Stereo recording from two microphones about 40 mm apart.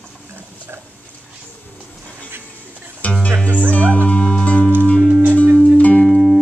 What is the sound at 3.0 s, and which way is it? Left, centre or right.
Music, left.